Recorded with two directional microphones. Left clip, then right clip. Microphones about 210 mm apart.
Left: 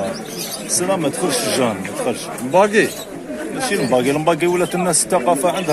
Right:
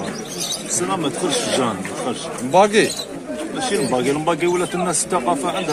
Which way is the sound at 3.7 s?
30° left (ahead or behind).